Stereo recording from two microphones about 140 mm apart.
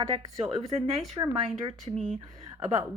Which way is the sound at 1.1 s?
25° right (ahead or behind).